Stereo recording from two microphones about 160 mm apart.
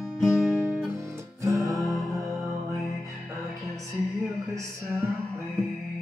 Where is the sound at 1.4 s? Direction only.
20° right (ahead or behind).